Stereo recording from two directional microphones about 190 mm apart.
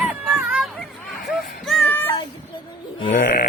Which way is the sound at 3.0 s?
40° left (ahead or behind).